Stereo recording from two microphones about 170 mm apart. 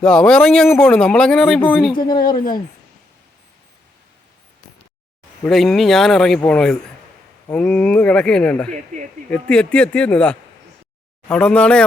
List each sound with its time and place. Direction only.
0.0 s speech: 5° left (ahead or behind)
1.9 s speech: 25° left (ahead or behind)
2.1 s speech: 55° left (ahead or behind)
5.5 s speech: centre (ahead or behind)